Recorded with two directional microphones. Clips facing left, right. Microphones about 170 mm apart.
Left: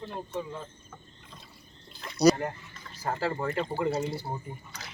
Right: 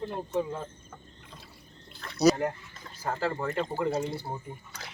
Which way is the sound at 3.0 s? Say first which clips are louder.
Even; 5° left (ahead or behind).